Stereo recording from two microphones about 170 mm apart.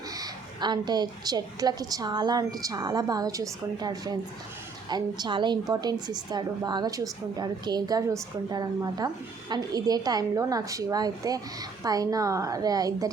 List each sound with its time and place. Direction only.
0.2 s a woman's voice: 25° right (ahead or behind)